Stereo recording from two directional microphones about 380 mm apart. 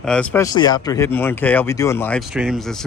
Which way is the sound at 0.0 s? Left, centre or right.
Centre.